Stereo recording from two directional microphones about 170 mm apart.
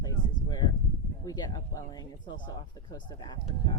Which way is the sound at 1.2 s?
25° left (ahead or behind).